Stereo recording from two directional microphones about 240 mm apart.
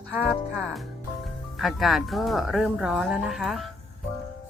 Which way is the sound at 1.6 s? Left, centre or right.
Centre.